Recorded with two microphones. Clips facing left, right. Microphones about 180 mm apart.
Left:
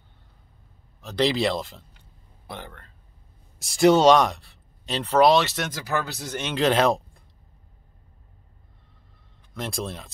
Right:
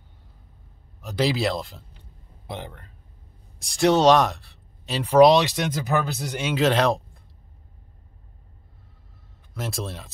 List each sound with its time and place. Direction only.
1.0 s speech: 5° right (ahead or behind)
2.4 s speech: 20° right (ahead or behind)
3.5 s speech: centre (ahead or behind)
9.5 s speech: 5° right (ahead or behind)